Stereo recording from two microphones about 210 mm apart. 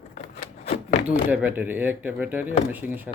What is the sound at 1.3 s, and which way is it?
Speech, 10° right (ahead or behind).